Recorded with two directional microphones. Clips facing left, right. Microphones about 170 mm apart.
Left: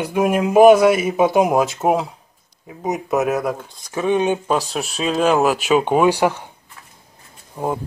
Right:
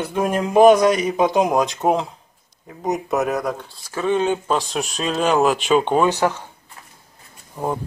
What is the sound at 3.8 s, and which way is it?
Speech, 15° left (ahead or behind).